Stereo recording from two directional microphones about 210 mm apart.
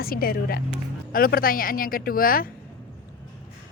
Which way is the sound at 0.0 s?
45° left (ahead or behind).